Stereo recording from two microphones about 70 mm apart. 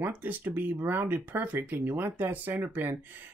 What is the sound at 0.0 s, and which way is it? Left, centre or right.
Speech, right.